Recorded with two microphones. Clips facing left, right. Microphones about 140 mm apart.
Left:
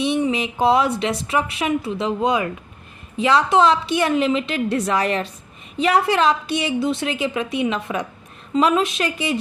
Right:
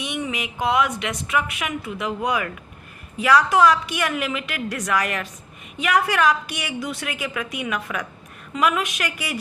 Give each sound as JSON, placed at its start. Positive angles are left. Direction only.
{"t": 0.0, "sound": "a woman's voice", "side_deg": 30}